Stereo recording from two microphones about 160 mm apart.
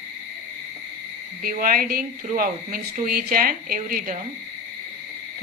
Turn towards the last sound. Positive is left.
turn(degrees=-60)  # may be behind; listen again after turning